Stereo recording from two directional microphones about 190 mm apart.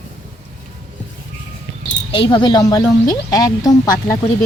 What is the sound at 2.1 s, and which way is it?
Speech, 25° left (ahead or behind).